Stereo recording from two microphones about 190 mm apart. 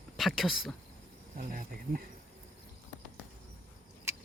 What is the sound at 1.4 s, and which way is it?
Speech, 45° right (ahead or behind).